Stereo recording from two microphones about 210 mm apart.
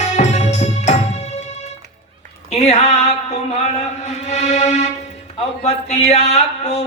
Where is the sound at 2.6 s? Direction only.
30° left (ahead or behind).